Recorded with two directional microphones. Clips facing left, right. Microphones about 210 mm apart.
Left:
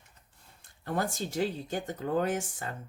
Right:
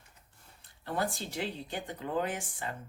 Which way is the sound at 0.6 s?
45° left (ahead or behind).